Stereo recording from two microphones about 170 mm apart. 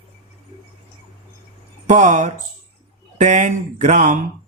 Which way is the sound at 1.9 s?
45° right (ahead or behind).